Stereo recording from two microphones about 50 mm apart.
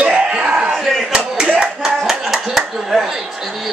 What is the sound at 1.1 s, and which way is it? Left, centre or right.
Slap, centre.